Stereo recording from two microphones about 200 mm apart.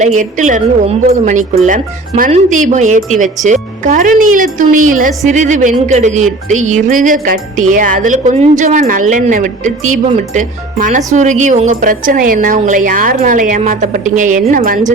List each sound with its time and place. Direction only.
0.0 s speech: 35° right (ahead or behind)